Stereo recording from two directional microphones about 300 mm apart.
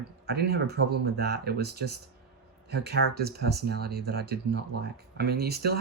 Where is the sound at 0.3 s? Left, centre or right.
Right.